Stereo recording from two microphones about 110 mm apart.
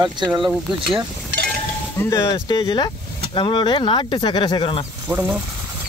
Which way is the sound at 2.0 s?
30° left (ahead or behind).